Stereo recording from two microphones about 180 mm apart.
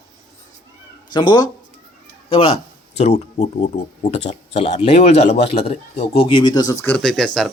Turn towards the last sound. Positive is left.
turn(degrees=5)  # may be behind; listen again after turning